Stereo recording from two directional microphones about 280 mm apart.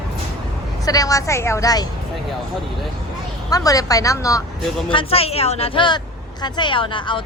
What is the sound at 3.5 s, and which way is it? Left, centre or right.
Speech, centre.